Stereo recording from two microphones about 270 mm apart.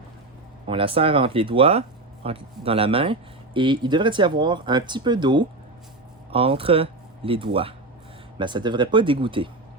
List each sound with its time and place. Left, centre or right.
0.7 s speech: centre